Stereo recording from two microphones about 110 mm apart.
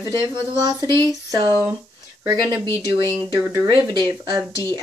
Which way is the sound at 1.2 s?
35° right (ahead or behind).